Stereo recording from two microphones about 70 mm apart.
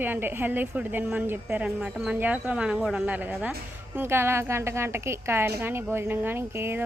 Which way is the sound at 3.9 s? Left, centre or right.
Right.